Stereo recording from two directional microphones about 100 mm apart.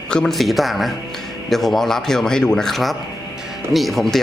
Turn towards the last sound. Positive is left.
turn(degrees=0)  # may be behind; listen again after turning